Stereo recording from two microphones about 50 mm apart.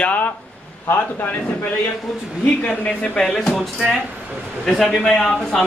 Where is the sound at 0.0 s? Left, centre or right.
Left.